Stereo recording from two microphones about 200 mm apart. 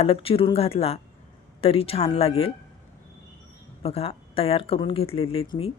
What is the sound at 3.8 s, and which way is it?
Speech, 30° left (ahead or behind).